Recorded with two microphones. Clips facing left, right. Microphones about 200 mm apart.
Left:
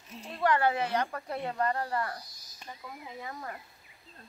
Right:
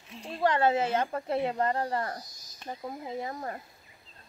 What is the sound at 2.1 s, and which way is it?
Speech, 45° right (ahead or behind).